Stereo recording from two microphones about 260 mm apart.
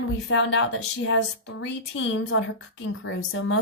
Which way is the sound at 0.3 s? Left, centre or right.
Left.